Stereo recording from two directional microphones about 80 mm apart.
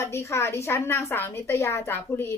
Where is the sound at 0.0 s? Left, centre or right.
Left.